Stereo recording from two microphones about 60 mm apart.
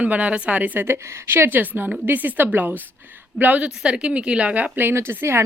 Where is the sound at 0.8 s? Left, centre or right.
Right.